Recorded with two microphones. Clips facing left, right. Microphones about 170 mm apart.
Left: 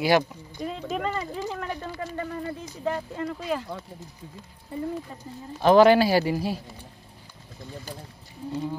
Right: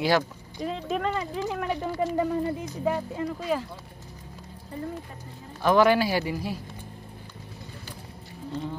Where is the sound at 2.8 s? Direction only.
5° right (ahead or behind).